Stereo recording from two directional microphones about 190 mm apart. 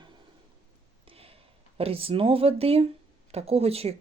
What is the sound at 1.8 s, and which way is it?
Speech, 30° right (ahead or behind).